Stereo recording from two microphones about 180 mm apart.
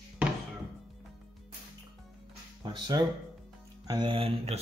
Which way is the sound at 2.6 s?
25° right (ahead or behind).